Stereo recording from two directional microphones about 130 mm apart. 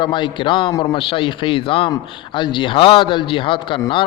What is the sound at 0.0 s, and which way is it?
A man's voice, 35° left (ahead or behind).